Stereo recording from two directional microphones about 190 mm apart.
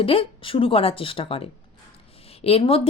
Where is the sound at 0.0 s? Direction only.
30° left (ahead or behind).